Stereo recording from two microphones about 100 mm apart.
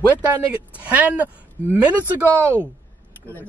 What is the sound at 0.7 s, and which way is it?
Speech, 15° right (ahead or behind).